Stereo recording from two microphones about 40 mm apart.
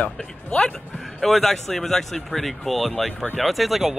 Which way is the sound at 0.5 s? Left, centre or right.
Left.